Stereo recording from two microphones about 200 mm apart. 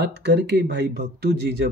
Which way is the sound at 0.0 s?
55° right (ahead or behind).